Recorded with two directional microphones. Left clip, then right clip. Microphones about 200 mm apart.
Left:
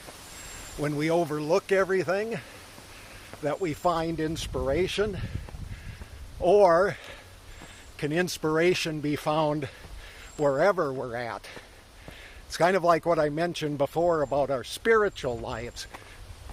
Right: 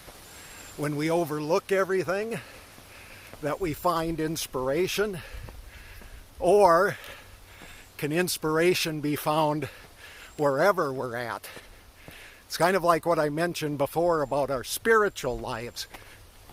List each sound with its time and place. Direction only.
0.8 s speech: 20° right (ahead or behind)
6.4 s speech: 30° right (ahead or behind)